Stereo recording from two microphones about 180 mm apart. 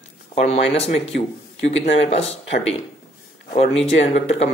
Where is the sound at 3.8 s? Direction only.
40° left (ahead or behind).